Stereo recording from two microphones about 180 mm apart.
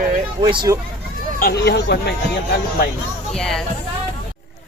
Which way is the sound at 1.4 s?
60° left (ahead or behind).